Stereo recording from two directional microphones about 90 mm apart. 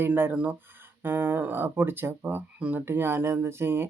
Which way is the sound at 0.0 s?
25° right (ahead or behind).